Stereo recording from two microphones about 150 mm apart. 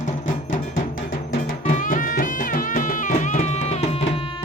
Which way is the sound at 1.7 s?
60° left (ahead or behind).